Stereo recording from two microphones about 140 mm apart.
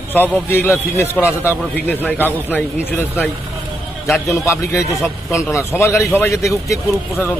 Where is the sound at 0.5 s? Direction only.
15° left (ahead or behind).